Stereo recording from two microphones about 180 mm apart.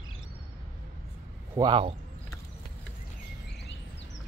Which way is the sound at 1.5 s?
25° right (ahead or behind).